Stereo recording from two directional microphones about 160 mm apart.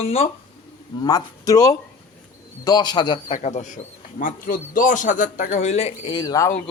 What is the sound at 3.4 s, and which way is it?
A man's voice, 50° left (ahead or behind).